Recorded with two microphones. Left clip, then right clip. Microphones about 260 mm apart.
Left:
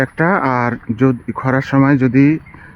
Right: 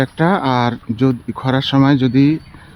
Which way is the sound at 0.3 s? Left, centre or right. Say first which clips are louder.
Left 2 dB; centre.